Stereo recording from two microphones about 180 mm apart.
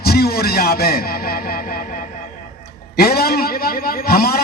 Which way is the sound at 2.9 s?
60° left (ahead or behind).